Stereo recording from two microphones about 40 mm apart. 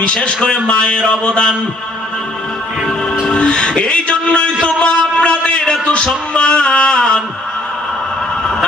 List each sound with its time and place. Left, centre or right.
0.0 s music: left
3.3 s a sound: left
5.8 s music: left